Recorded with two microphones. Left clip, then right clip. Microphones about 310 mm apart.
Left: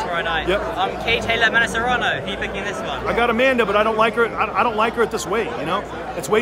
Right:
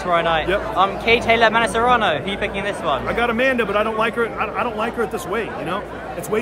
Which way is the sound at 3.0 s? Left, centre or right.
Centre.